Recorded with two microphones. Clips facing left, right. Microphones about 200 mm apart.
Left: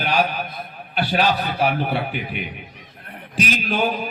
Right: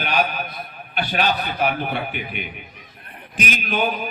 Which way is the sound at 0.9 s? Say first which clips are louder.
Left 2 dB; 35° left (ahead or behind).